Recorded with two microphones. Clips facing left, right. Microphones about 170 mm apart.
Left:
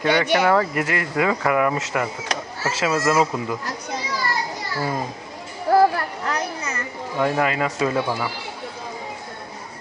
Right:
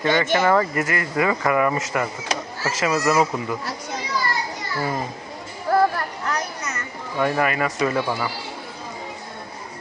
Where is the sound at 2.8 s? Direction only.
10° right (ahead or behind).